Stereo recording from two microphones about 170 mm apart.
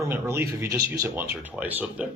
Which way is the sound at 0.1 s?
15° right (ahead or behind).